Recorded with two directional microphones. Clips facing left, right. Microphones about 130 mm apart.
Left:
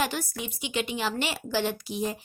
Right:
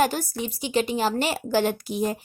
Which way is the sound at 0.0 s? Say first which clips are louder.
Right 6 dB; 40° right (ahead or behind).